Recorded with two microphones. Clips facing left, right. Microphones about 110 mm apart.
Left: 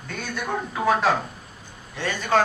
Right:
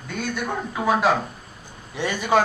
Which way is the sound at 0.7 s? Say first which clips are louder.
Right 1 dB; 5° right (ahead or behind).